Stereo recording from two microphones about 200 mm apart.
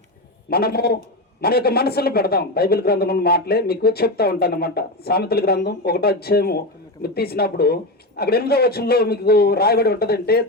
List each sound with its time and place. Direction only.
0.5 s a man's voice: 50° left (ahead or behind)